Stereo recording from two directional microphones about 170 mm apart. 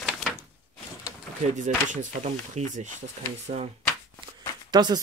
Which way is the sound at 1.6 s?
45° right (ahead or behind).